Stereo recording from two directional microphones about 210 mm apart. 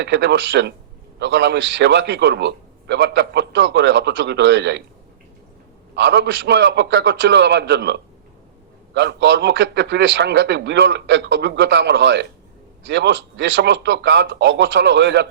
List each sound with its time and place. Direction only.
0.0 s a man's voice: 55° right (ahead or behind)
6.0 s a man's voice: 55° right (ahead or behind)